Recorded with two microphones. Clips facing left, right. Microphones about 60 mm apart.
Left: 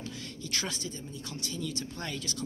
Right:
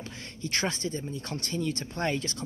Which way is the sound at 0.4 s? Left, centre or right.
Right.